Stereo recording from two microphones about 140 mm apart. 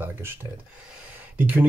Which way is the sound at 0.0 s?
15° right (ahead or behind).